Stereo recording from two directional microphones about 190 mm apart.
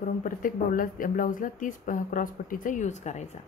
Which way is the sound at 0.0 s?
45° left (ahead or behind).